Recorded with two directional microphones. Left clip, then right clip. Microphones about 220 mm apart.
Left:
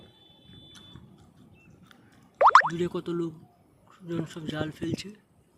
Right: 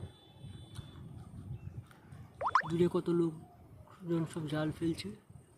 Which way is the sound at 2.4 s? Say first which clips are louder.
Left 14 dB; 40° left (ahead or behind).